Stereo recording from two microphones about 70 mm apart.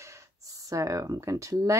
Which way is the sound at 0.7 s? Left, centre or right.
Right.